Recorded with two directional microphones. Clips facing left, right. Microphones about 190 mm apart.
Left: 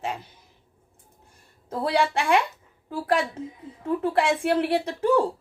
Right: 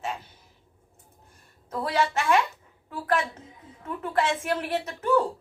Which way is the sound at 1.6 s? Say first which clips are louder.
Left 3 dB; 30° left (ahead or behind).